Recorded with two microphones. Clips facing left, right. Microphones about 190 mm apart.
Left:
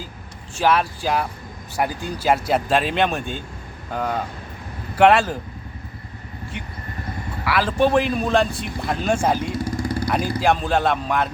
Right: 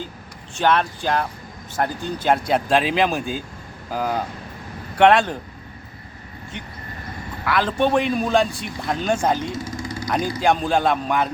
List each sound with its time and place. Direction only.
0.6 s a man's voice: 5° left (ahead or behind)
7.4 s a man's voice: 5° left (ahead or behind)
9.6 s vehicle: 60° left (ahead or behind)
10.1 s a man's voice: 5° left (ahead or behind)